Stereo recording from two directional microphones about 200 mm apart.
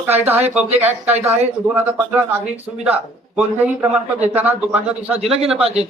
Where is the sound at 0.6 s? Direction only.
35° right (ahead or behind).